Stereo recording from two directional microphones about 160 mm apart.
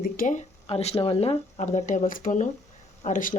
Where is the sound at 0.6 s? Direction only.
40° left (ahead or behind).